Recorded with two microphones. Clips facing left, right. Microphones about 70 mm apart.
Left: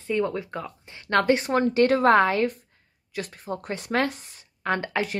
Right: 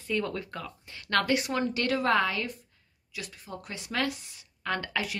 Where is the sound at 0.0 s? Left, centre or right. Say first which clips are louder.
Left 5 dB; left.